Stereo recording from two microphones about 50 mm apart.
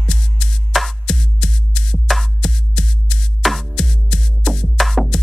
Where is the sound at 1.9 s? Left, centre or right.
Centre.